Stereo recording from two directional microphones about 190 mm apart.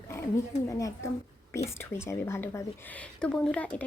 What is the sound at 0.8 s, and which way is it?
Speech, 15° left (ahead or behind).